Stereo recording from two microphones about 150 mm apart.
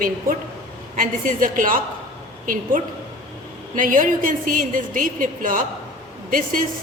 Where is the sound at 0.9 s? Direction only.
60° right (ahead or behind).